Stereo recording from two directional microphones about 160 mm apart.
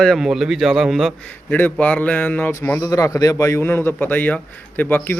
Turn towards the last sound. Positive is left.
turn(degrees=10)  # may be behind; listen again after turning